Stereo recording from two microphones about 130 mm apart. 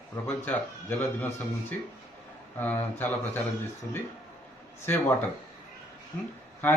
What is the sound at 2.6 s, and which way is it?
Speech, 15° left (ahead or behind).